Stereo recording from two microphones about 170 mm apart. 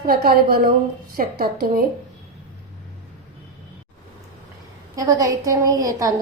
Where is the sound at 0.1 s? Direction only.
60° right (ahead or behind).